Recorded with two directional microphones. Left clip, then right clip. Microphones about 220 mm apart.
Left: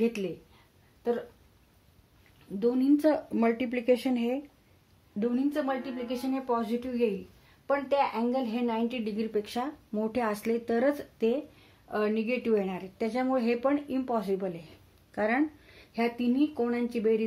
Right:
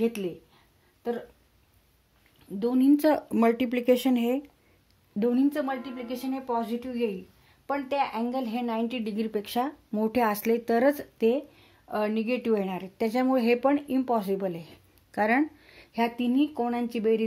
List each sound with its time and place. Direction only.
2.6 s a woman's voice: 40° right (ahead or behind)